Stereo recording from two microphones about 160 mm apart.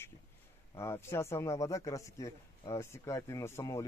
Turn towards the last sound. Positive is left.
turn(degrees=20)  # may be behind; listen again after turning